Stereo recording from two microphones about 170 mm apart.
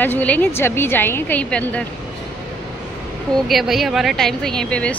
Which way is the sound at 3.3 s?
Centre (ahead or behind).